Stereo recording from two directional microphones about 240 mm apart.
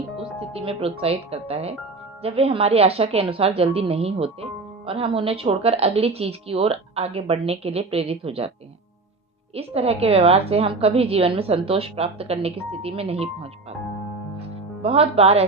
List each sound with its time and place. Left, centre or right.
0.2 s a woman's voice: right
9.6 s a woman's voice: right
14.3 s music: right